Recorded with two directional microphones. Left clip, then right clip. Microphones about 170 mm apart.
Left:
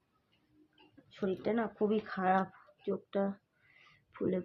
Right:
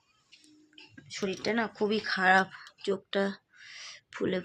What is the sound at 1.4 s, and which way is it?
Speech, 15° right (ahead or behind).